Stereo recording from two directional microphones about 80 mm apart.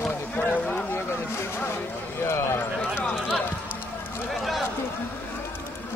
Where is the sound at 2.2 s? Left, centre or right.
Left.